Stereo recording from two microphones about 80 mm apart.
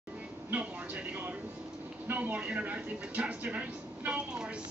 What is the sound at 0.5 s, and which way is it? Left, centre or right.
Speech, centre.